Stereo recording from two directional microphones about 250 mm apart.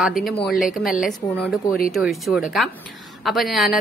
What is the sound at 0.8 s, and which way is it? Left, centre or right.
Speech, left.